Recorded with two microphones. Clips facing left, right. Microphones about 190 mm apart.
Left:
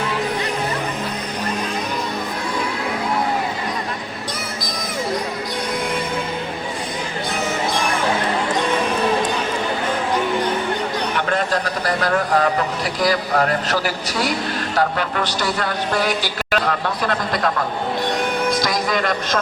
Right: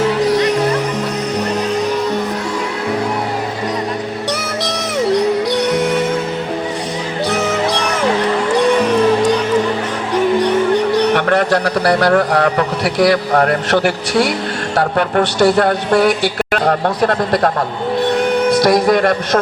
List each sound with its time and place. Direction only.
0.2 s music: 80° right
4.6 s music: 75° right (ahead or behind)
7.3 s music: 75° right (ahead or behind)
10.4 s music: 75° right (ahead or behind)
12.1 s a man's voice: 70° right (ahead or behind)
18.6 s a man's voice: 55° right (ahead or behind)